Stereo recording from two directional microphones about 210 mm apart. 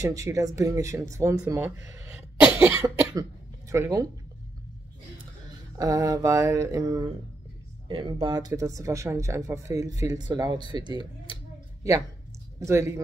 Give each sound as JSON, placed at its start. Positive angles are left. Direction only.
{"t": 0.0, "sound": "speech", "side_deg": -15}
{"t": 5.8, "sound": "speech", "side_deg": -15}
{"t": 12.5, "sound": "speech", "side_deg": -15}